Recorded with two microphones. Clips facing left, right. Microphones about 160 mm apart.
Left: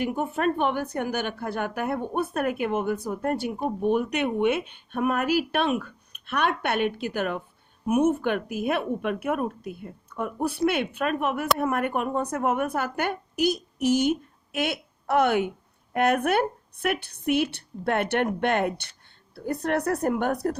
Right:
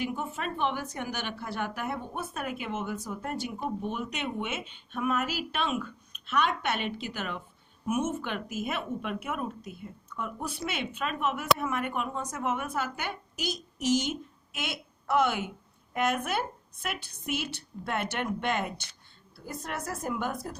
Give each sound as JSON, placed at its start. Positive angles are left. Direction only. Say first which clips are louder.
{"t": 0.0, "sound": "a woman's voice", "louder": "left 8 dB", "side_deg": 55}